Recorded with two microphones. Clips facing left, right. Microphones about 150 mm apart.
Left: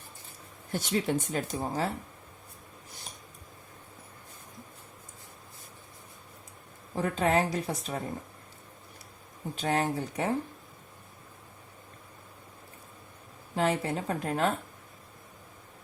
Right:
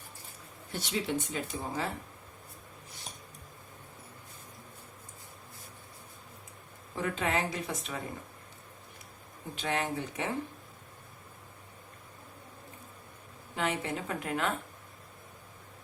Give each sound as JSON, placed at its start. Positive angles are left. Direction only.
{"t": 0.7, "sound": "speech", "side_deg": 45}
{"t": 6.9, "sound": "a woman's voice", "side_deg": 40}
{"t": 9.6, "sound": "a woman's voice", "side_deg": 40}
{"t": 13.6, "sound": "a woman's voice", "side_deg": 35}